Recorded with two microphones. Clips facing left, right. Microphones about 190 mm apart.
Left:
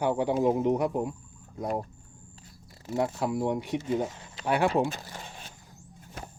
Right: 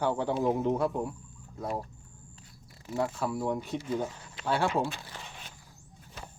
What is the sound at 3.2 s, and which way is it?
Speech, 15° left (ahead or behind).